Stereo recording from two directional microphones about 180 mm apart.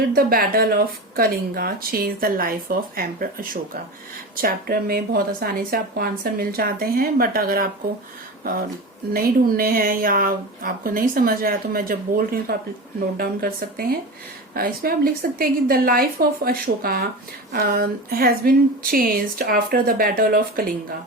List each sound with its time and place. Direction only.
0.1 s speech: 55° right (ahead or behind)
9.1 s speech: 55° right (ahead or behind)